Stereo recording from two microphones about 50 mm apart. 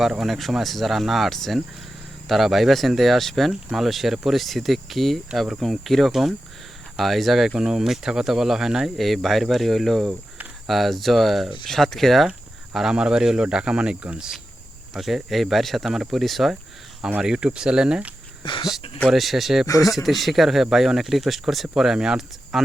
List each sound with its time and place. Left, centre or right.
0.0 s speech: centre
7.5 s speech: centre
12.7 s speech: centre
14.9 s speech: centre
17.2 s speech: centre
19.0 s speech: centre
22.5 s speech: centre